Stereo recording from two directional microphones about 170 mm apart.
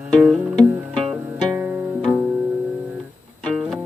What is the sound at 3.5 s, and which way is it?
Music, 5° right (ahead or behind).